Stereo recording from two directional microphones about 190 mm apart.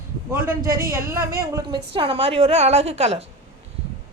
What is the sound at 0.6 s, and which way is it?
A woman's voice, 15° right (ahead or behind).